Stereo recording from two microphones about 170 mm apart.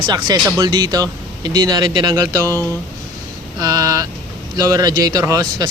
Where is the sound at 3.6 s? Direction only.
20° right (ahead or behind).